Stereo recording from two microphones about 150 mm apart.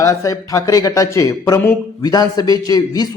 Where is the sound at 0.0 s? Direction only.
20° left (ahead or behind).